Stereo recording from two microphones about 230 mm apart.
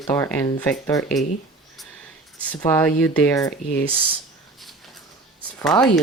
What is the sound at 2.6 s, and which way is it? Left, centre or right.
Speech, centre.